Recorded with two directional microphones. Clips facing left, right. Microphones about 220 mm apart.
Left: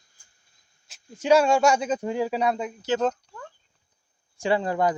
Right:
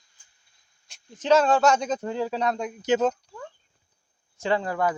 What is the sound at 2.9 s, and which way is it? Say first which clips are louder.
Speech: right 3 dB; 15° right (ahead or behind).